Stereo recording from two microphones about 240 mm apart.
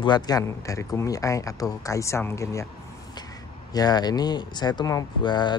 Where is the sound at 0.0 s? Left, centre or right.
Centre.